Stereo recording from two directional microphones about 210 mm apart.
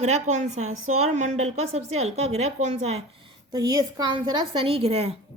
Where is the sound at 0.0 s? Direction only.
35° right (ahead or behind).